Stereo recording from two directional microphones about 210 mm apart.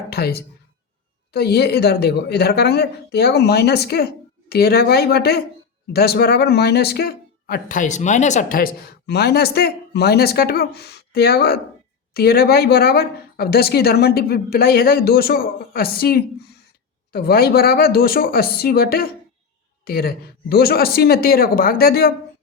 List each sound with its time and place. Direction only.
0.1 s speech: 50° left (ahead or behind)